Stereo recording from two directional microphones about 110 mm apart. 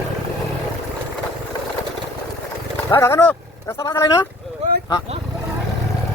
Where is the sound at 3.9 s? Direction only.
40° left (ahead or behind).